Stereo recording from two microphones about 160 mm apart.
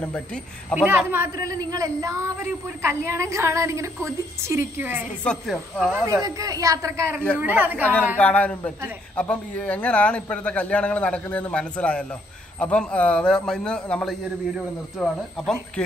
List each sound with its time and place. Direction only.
0.0 s a man's voice: 5° left (ahead or behind)
0.7 s a woman's voice: 15° right (ahead or behind)
5.2 s a woman's voice: 5° left (ahead or behind)
5.8 s a woman's voice: 10° right (ahead or behind)
8.2 s a man's voice: 10° left (ahead or behind)